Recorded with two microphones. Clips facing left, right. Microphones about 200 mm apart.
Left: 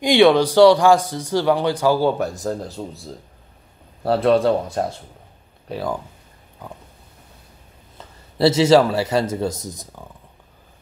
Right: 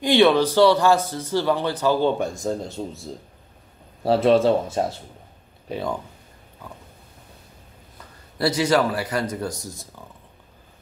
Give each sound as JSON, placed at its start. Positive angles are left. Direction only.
{"t": 0.0, "sound": "a man's voice", "side_deg": 15}
{"t": 8.0, "sound": "a man's voice", "side_deg": 25}